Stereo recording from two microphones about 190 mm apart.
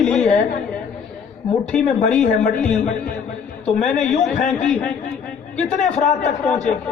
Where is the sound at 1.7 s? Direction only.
Centre (ahead or behind).